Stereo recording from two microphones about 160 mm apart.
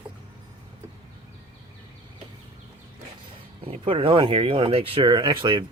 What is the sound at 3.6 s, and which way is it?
Speech, 35° right (ahead or behind).